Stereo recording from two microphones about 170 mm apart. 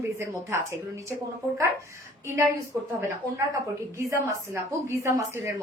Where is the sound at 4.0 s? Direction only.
15° right (ahead or behind).